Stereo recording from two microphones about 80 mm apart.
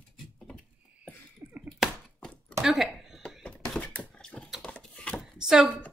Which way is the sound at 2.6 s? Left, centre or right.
Centre.